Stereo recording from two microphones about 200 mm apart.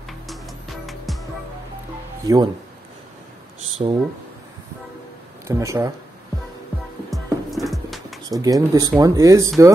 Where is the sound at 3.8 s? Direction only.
30° right (ahead or behind).